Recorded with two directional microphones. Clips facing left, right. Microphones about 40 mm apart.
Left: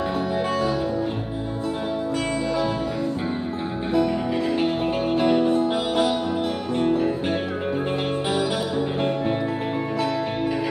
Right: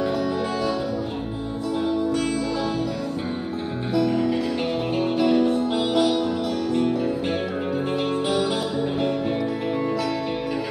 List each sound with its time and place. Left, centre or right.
2.1 s music: left
3.9 s music: left
8.1 s music: left